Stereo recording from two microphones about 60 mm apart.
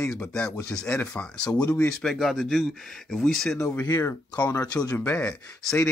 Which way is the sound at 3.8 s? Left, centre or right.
Left.